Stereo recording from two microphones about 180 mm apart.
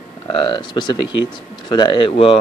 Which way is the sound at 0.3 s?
25° left (ahead or behind).